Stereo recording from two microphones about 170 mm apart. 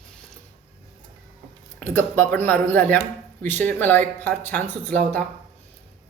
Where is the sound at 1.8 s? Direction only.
10° left (ahead or behind).